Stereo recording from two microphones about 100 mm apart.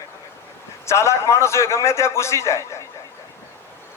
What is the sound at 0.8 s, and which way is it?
A man's voice, 30° left (ahead or behind).